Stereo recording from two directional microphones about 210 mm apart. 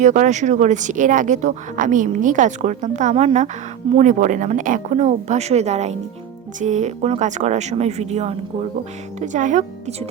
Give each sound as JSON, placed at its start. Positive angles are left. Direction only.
{"t": 0.0, "sound": "speech", "side_deg": -35}